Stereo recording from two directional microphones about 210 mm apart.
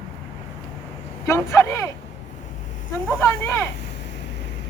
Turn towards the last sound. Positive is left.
turn(degrees=10)  # may be behind; listen again after turning